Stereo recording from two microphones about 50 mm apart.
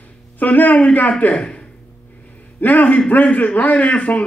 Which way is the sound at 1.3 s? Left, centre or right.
Centre.